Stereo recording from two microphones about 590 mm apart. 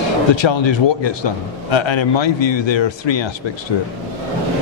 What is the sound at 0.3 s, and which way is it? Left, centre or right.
A man's voice, left.